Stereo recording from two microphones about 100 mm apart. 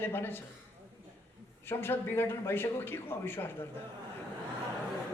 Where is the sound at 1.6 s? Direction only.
20° left (ahead or behind).